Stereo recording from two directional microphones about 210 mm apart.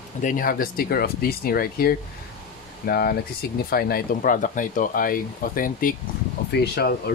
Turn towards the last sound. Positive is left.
turn(degrees=50)  # may be behind; listen again after turning